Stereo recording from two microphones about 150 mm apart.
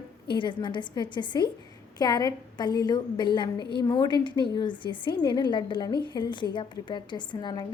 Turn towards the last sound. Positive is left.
turn(degrees=30)  # may be behind; listen again after turning